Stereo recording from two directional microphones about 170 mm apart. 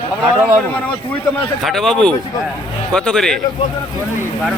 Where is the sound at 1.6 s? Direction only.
Centre (ahead or behind).